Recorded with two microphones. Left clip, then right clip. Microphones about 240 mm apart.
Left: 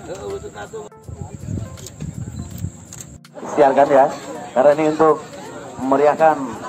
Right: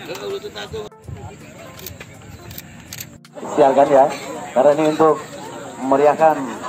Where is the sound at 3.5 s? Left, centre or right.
Right.